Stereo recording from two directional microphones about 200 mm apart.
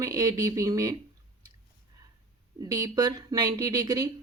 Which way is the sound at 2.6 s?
20° right (ahead or behind).